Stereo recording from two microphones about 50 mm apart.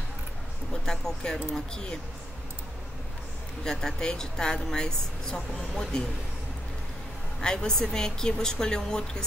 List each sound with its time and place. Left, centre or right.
0.8 s a woman's voice: centre
3.6 s a woman's voice: centre
7.4 s a woman's voice: centre